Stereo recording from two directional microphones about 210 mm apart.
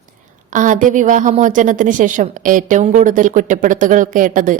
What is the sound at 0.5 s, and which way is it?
A woman's voice, 40° right (ahead or behind).